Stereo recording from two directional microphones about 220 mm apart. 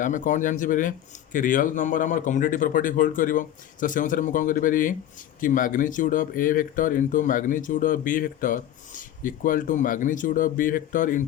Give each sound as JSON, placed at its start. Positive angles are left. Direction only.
{"t": 0.0, "sound": "speech", "side_deg": 35}